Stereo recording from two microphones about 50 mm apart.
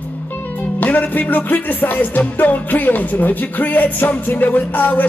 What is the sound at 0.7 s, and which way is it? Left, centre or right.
Music, left.